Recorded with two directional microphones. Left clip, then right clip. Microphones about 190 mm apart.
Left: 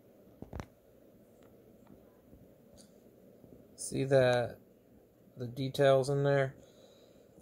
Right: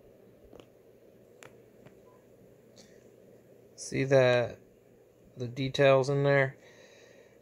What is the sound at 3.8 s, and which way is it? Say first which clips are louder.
Speech: right 3 dB; 20° right (ahead or behind).